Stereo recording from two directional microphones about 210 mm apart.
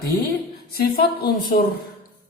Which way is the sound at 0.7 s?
45° left (ahead or behind).